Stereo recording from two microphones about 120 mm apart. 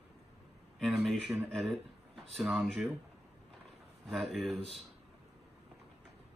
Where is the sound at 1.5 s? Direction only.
Centre (ahead or behind).